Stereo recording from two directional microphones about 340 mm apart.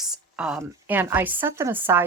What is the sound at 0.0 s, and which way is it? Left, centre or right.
Speech, centre.